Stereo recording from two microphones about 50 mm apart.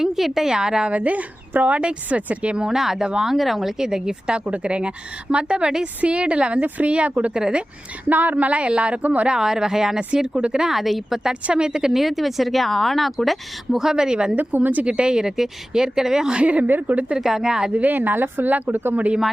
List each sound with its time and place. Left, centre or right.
0.0 s a woman's voice: centre; by 2.6 s right
2.6 s a woman's voice: centre
3.3 s a woman's voice: centre
4.4 s a woman's voice: right
7.3 s a woman's voice: centre
8.1 s a woman's voice: right
9.0 s speech: right
9.2 s a woman's voice: centre
10.8 s a woman's voice: centre
14.3 s speech: right
14.8 s a woman's voice: centre
16.4 s a woman's voice: right
17.2 s a woman's voice: centre
17.7 s speech: right